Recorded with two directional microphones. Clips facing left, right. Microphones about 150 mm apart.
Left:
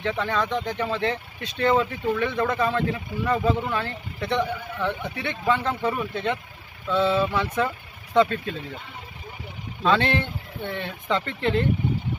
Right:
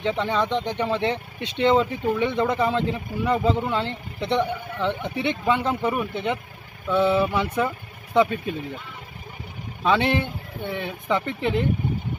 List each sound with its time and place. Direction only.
0.0 s speech: 20° right (ahead or behind)
9.8 s speech: 15° right (ahead or behind)